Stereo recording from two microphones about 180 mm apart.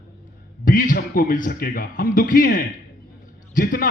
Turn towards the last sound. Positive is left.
turn(degrees=50)  # may be behind; listen again after turning